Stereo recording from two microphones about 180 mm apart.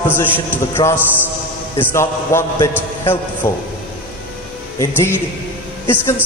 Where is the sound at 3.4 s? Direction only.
15° left (ahead or behind).